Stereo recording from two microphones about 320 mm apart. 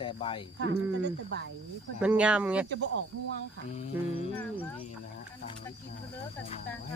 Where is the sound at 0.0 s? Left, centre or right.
Centre.